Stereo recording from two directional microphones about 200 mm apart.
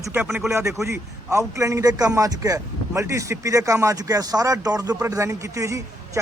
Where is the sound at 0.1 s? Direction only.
10° right (ahead or behind).